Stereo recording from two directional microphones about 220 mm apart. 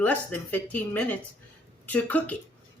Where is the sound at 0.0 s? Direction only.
5° left (ahead or behind).